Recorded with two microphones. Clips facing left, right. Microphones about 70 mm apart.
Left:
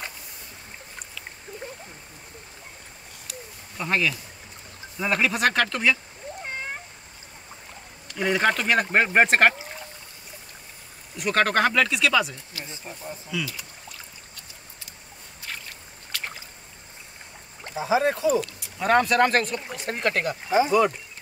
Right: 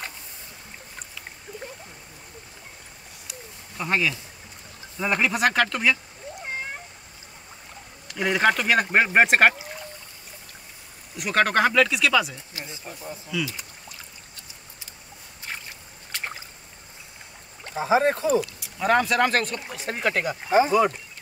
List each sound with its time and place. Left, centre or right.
3.7 s speech: centre
8.1 s speech: centre
11.1 s speech: centre
17.7 s speech: right
18.6 s speech: centre
20.4 s speech: right